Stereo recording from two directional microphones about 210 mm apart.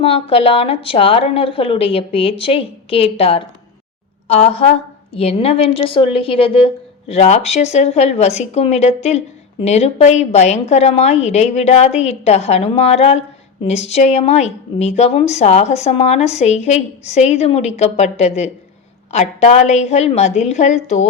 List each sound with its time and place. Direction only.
0.0 s speech: 25° left (ahead or behind)